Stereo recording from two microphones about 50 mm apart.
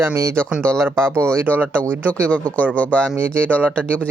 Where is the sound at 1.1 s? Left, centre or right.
Right.